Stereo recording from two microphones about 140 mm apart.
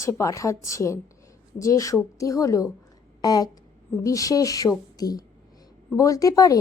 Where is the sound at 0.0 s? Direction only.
20° left (ahead or behind).